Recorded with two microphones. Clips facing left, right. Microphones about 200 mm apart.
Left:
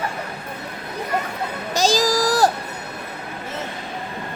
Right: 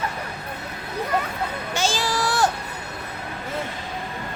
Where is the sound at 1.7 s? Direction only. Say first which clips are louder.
Left 6 dB; 40° left (ahead or behind).